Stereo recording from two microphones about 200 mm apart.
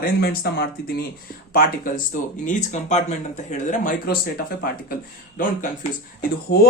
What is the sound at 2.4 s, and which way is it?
Speech, 35° left (ahead or behind).